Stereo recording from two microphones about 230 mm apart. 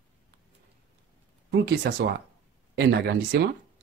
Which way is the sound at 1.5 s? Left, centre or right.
Right.